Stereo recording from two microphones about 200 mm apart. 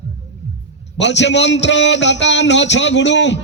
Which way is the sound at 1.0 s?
60° left (ahead or behind).